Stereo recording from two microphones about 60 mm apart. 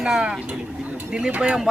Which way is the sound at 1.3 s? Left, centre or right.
Right.